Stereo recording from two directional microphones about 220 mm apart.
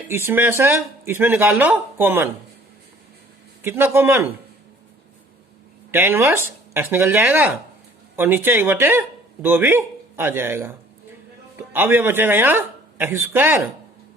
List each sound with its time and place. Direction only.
0.1 s speech: 10° right (ahead or behind)
3.6 s speech: 10° right (ahead or behind)
5.9 s speech: 10° right (ahead or behind)